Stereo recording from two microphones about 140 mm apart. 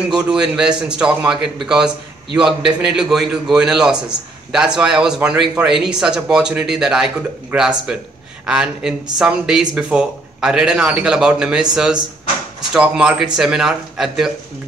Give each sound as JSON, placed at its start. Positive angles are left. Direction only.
{"t": 0.1, "sound": "speech", "side_deg": -5}